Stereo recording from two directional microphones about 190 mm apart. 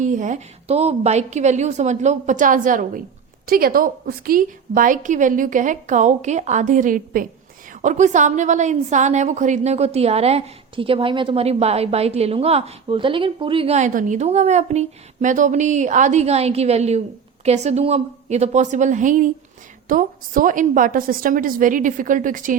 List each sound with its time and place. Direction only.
0.0 s a woman's voice: 40° right (ahead or behind)